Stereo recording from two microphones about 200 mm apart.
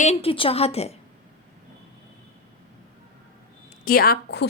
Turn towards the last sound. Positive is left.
turn(degrees=55)  # may be behind; listen again after turning